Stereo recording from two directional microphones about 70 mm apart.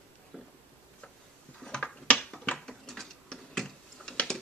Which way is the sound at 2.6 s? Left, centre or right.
Centre.